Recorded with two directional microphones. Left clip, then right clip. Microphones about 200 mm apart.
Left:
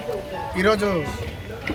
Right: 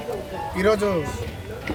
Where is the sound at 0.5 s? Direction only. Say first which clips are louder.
Left 1 dB; 15° right (ahead or behind).